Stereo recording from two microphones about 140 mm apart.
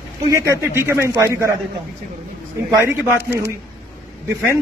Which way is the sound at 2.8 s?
15° right (ahead or behind).